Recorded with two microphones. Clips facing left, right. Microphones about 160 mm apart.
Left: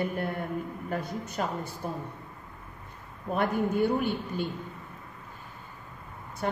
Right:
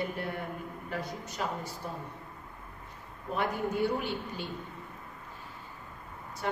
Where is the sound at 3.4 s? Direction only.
50° left (ahead or behind).